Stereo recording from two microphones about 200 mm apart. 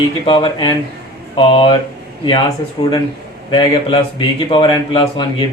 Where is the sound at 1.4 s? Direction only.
25° left (ahead or behind).